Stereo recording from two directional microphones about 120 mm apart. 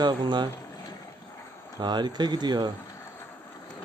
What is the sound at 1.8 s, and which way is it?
Speech, 35° right (ahead or behind).